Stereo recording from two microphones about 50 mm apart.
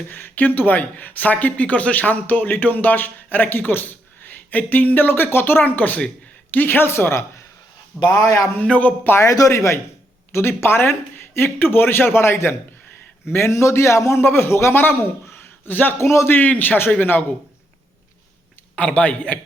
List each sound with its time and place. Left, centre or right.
0.1 s speech: left
5.6 s a man's voice: left
8.6 s a man's voice: left
9.1 s a man's voice: left
10.3 s a man's voice: left
14.2 s a man's voice: left
15.7 s speech: left
16.0 s a man's voice: left
16.3 s speech: left
18.8 s speech: left